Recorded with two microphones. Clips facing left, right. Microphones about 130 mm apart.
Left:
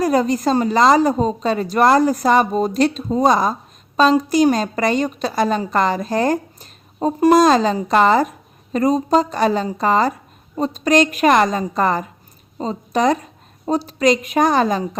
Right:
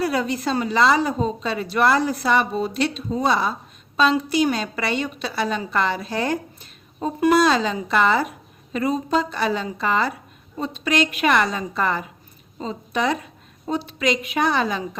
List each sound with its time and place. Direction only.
0.0 s a woman's voice: 40° left (ahead or behind)